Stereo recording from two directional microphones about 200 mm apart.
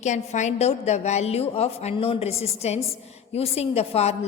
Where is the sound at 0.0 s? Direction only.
35° left (ahead or behind).